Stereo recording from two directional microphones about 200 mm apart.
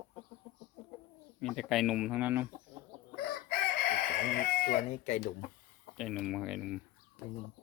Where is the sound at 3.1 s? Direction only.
50° left (ahead or behind).